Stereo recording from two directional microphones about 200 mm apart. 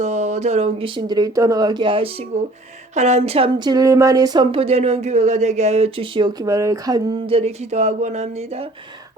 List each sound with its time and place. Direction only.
0.0 s speech: 35° right (ahead or behind)